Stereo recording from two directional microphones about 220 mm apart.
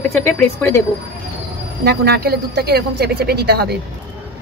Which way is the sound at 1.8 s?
45° right (ahead or behind).